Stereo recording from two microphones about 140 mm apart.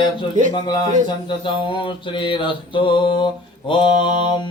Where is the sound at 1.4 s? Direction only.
35° left (ahead or behind).